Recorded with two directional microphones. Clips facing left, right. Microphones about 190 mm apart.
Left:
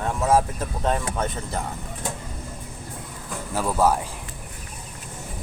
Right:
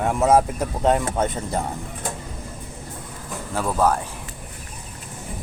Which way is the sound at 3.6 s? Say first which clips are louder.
Even; 10° left (ahead or behind).